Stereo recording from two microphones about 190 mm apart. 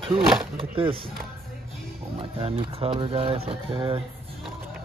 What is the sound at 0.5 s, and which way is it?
Speech, 30° right (ahead or behind).